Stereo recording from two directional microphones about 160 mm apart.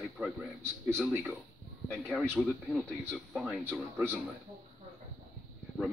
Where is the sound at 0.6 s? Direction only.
15° right (ahead or behind).